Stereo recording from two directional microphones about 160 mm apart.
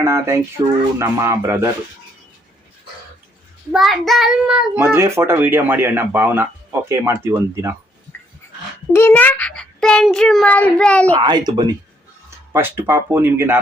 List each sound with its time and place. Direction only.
0.0 s a child's voice: 15° right (ahead or behind)
3.7 s a child's voice: centre (ahead or behind); by 7.8 s 15° right (ahead or behind)
8.9 s a child's voice: 15° left (ahead or behind)
11.2 s a child's voice: 25° right (ahead or behind)